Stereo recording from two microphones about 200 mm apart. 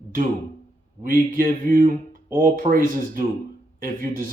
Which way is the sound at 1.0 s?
45° right (ahead or behind).